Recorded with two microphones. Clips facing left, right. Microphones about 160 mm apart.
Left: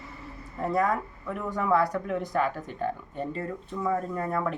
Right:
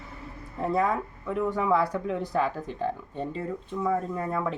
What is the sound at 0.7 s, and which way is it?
Speech, 25° right (ahead or behind).